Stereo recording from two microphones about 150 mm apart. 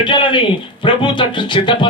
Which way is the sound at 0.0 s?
35° left (ahead or behind).